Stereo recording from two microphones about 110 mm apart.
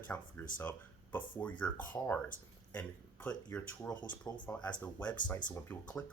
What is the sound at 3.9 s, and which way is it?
Speech, 45° left (ahead or behind).